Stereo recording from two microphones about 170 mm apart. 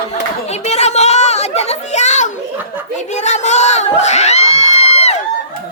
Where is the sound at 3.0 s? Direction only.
45° left (ahead or behind).